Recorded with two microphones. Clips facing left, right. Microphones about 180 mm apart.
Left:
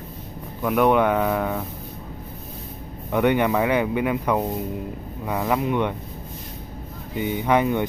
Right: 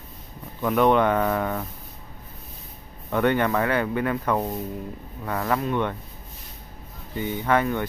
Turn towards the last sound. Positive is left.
turn(degrees=15)  # may be behind; listen again after turning